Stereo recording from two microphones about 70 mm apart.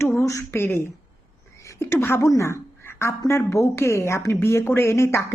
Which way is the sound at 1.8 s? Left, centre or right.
Left.